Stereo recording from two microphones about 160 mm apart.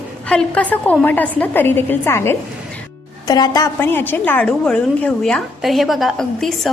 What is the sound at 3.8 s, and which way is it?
A woman's voice, 15° left (ahead or behind).